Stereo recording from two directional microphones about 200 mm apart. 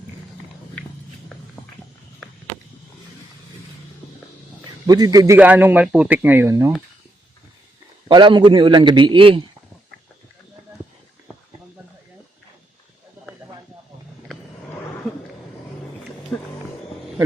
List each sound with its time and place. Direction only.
4.9 s a man's voice: 20° right (ahead or behind)
8.0 s a man's voice: 25° right (ahead or behind)
16.3 s a sound: 15° left (ahead or behind)